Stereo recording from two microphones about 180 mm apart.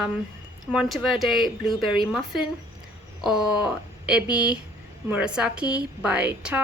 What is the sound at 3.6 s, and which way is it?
A woman's voice, 5° right (ahead or behind).